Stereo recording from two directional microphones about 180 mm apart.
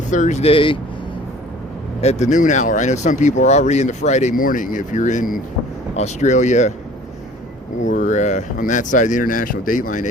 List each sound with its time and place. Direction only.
0.1 s speech: 40° left (ahead or behind)
2.0 s speech: 40° left (ahead or behind)
7.8 s speech: 45° left (ahead or behind)